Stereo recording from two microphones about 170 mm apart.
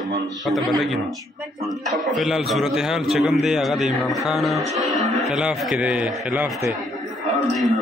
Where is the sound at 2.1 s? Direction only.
Centre (ahead or behind).